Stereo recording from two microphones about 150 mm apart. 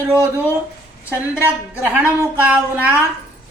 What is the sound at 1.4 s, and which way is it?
A woman's voice, 10° right (ahead or behind).